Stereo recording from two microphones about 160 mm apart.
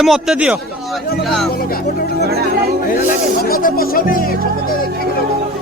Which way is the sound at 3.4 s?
70° left (ahead or behind).